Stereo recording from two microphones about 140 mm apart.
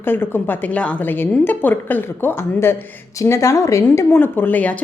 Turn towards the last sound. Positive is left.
turn(degrees=10)  # may be behind; listen again after turning